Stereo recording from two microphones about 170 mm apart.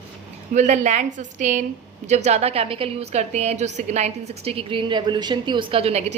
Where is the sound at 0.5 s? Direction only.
45° right (ahead or behind).